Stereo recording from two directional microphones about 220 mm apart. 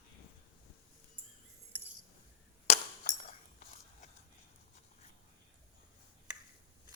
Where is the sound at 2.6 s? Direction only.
35° left (ahead or behind).